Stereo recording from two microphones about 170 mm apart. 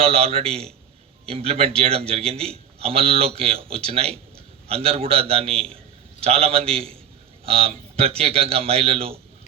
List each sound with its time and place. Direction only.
0.0 s a man's voice: 35° right (ahead or behind)